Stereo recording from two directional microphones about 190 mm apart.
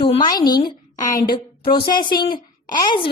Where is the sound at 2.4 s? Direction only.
25° left (ahead or behind).